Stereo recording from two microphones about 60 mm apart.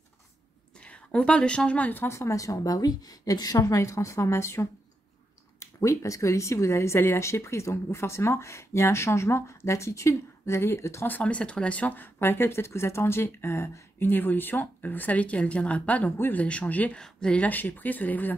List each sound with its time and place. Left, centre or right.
0.7 s a woman's voice: centre
2.0 s a woman's voice: left
3.5 s a woman's voice: left
5.6 s speech: left
11.1 s speech: left
12.2 s speech: left
17.0 s speech: centre
17.4 s speech: left